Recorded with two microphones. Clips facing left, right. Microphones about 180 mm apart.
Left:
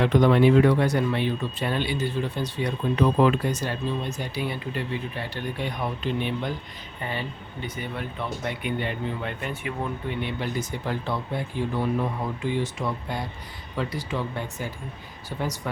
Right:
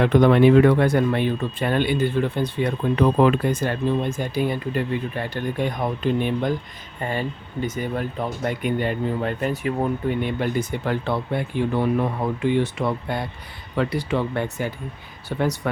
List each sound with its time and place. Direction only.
0.0 s speech: 60° right (ahead or behind)